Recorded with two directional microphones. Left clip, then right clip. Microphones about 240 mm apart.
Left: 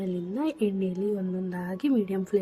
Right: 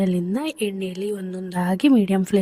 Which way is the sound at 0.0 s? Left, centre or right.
Right.